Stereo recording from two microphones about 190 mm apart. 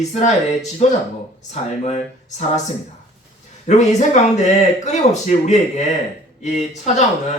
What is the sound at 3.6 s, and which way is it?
Speech, 40° left (ahead or behind).